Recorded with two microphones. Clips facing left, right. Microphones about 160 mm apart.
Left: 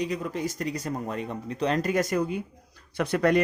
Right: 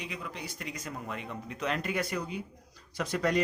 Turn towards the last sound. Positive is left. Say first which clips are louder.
# left 6 dB
turn(degrees=60)  # may be behind; listen again after turning